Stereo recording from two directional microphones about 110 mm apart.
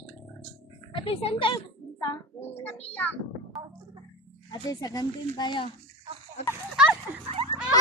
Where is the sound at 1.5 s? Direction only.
35° left (ahead or behind).